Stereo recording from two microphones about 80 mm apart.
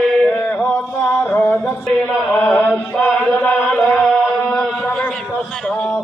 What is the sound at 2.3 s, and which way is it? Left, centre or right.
Chant, centre.